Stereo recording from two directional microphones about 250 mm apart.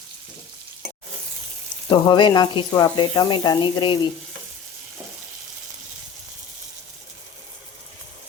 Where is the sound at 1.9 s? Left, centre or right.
Centre.